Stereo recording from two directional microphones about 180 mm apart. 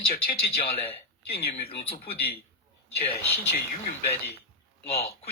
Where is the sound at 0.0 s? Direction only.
55° left (ahead or behind).